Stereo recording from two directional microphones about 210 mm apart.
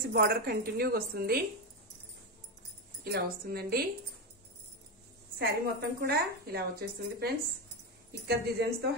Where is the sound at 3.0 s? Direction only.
50° right (ahead or behind).